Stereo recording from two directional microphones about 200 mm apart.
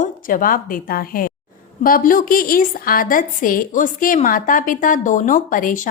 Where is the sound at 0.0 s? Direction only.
40° left (ahead or behind).